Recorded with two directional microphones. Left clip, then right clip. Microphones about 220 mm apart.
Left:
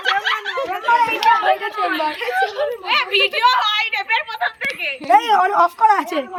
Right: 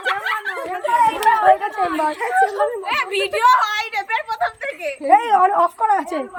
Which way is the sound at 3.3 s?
20° right (ahead or behind).